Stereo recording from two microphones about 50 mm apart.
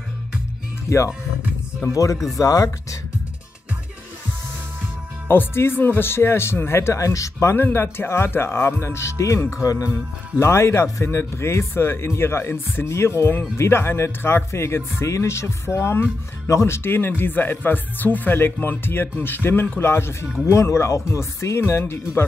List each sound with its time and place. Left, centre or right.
0.8 s speech: left
2.3 s speech: left
5.3 s speech: left
7.5 s speech: left
20.6 s speech: left
21.5 s speech: left